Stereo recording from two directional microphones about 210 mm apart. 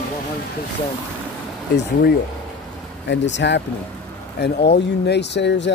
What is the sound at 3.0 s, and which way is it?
Speech, 55° left (ahead or behind).